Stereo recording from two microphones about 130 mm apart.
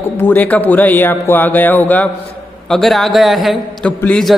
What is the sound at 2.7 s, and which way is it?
A man's voice, centre (ahead or behind).